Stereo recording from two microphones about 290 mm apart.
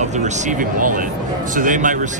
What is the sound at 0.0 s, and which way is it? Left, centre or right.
Speech, right.